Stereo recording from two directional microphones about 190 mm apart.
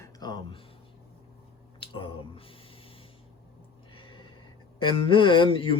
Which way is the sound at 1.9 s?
30° left (ahead or behind).